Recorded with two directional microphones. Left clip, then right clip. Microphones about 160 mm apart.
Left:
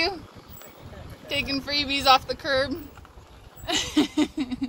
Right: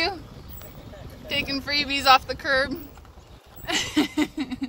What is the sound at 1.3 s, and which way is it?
Speech, 5° left (ahead or behind).